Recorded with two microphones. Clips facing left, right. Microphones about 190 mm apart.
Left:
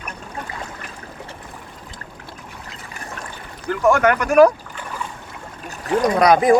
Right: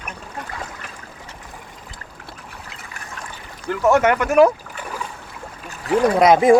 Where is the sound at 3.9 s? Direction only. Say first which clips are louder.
Even; 25° right (ahead or behind).